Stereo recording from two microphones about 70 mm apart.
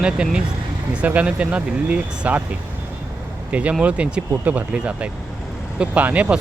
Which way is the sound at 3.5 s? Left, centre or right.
Centre.